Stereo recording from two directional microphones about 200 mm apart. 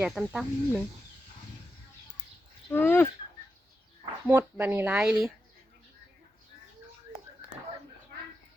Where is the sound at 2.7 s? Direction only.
10° left (ahead or behind).